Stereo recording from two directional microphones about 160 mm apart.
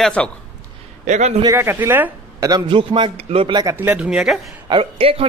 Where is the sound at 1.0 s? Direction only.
45° right (ahead or behind).